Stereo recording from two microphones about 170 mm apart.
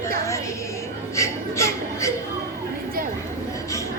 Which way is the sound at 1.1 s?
15° left (ahead or behind).